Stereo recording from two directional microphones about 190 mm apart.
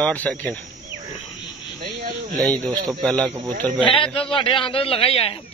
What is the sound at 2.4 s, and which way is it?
Speech, 5° left (ahead or behind).